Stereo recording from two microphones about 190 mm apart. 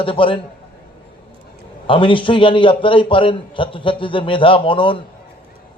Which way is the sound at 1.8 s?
25° left (ahead or behind).